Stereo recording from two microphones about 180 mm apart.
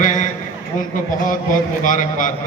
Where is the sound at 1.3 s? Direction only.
45° left (ahead or behind).